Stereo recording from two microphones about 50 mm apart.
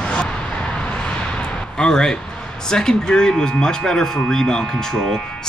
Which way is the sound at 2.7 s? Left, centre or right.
Centre.